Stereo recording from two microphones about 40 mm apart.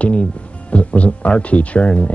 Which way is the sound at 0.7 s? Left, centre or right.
Left.